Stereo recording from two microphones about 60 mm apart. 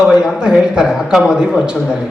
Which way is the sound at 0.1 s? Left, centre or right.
Centre.